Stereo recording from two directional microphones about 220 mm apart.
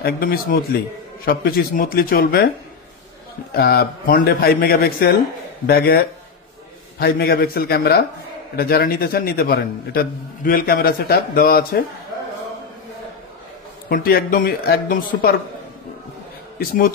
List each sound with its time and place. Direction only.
0.0 s a man's voice: 45° left (ahead or behind)
3.5 s a man's voice: 45° left (ahead or behind)
13.8 s a man's voice: 45° left (ahead or behind)
16.5 s speech: 40° left (ahead or behind)